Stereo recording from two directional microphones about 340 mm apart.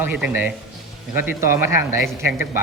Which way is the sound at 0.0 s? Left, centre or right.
Centre.